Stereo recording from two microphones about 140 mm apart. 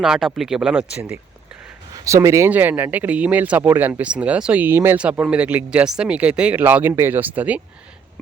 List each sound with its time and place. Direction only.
0.0 s speech: 5° right (ahead or behind)
2.0 s speech: 20° right (ahead or behind)